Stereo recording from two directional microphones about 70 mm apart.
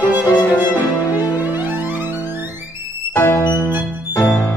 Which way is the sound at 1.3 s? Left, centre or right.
Right.